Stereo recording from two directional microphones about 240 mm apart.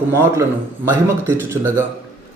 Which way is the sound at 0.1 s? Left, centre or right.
Centre.